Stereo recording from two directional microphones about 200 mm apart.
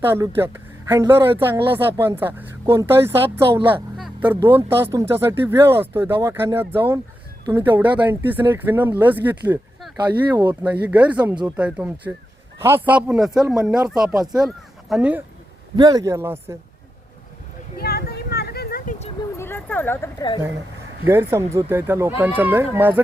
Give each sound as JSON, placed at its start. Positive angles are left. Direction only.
{"t": 0.0, "sound": "speech", "side_deg": -10}
{"t": 3.9, "sound": "a sound", "side_deg": 0}
{"t": 4.3, "sound": "speech", "side_deg": -10}
{"t": 10.1, "sound": "speech", "side_deg": -20}
{"t": 10.5, "sound": "speech", "side_deg": -10}
{"t": 11.2, "sound": "speech", "side_deg": -20}
{"t": 13.6, "sound": "speech", "side_deg": -15}
{"t": 14.4, "sound": "speech", "side_deg": 0}
{"t": 15.7, "sound": "speech", "side_deg": -20}
{"t": 17.7, "sound": "a sound", "side_deg": 50}
{"t": 19.4, "sound": "speech", "side_deg": 10}
{"t": 21.1, "sound": "speech", "side_deg": -10}